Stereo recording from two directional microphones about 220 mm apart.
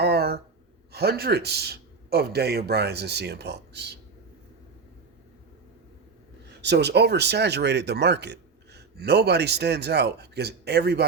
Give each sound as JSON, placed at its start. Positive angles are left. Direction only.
{"t": 0.0, "sound": "a sound", "side_deg": -45}
{"t": 0.9, "sound": "speech", "side_deg": -45}
{"t": 6.6, "sound": "speech", "side_deg": -50}